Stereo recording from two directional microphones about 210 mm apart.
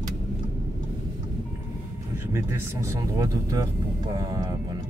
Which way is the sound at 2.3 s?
15° right (ahead or behind).